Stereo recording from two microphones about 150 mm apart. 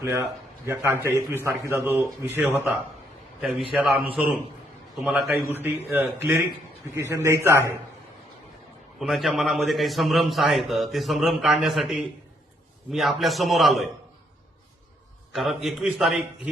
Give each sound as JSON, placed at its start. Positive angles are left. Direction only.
{"t": 0.0, "sound": "a man's voice", "side_deg": -20}
{"t": 3.8, "sound": "a man's voice", "side_deg": 0}
{"t": 5.5, "sound": "a man's voice", "side_deg": -15}
{"t": 9.0, "sound": "a man's voice", "side_deg": 0}
{"t": 15.3, "sound": "a man's voice", "side_deg": 0}